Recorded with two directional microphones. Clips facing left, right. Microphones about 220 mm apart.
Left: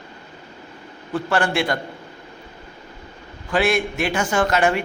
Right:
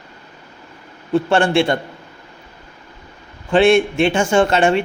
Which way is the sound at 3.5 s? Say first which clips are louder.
Right 7 dB; 25° right (ahead or behind).